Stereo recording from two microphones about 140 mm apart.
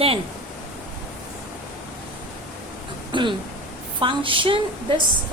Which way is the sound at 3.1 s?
35° right (ahead or behind).